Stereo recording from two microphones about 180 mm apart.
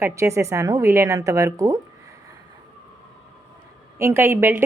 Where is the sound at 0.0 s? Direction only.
15° right (ahead or behind).